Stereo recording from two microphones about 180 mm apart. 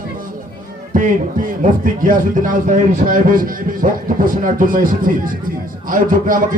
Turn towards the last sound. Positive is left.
turn(degrees=-50)  # may be behind; listen again after turning